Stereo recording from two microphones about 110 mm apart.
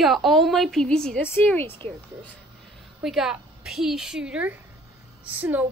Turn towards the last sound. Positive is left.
turn(degrees=-15)  # may be behind; listen again after turning